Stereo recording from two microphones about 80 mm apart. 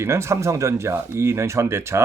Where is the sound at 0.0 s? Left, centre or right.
Right.